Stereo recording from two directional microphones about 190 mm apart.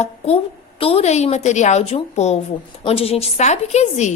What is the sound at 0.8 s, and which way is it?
A woman's voice, 30° left (ahead or behind).